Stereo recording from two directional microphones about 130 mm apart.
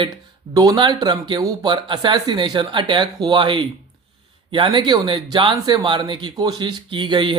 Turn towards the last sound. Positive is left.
turn(degrees=-40)  # may be behind; listen again after turning